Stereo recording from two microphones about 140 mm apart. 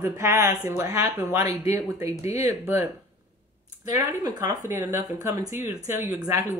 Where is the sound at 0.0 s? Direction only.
15° right (ahead or behind).